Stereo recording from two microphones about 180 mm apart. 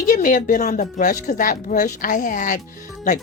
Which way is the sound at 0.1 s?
50° left (ahead or behind).